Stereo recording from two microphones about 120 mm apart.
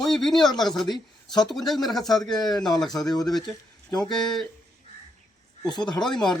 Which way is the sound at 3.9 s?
35° left (ahead or behind).